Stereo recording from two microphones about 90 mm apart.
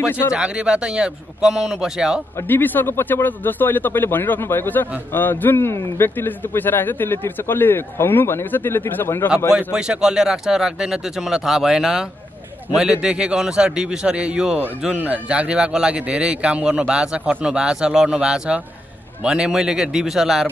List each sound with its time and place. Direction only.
0.3 s speech: 10° right (ahead or behind)
2.3 s a man's voice: 20° left (ahead or behind)
9.6 s speech: 10° right (ahead or behind)